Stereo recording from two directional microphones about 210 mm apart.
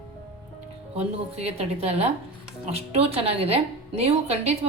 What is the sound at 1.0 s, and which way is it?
A woman's voice, 30° right (ahead or behind).